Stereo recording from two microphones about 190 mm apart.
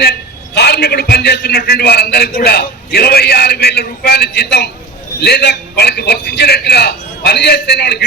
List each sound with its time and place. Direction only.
0.0 s a man's voice: 60° left (ahead or behind)